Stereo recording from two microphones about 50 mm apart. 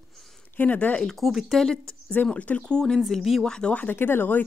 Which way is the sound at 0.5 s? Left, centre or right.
Left.